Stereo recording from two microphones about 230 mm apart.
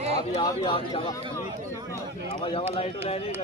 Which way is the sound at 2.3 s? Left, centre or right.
Left.